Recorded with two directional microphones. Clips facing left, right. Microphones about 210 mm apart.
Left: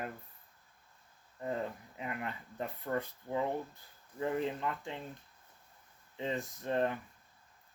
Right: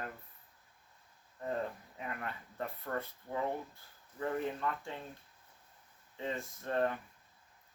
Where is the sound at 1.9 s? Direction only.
15° left (ahead or behind).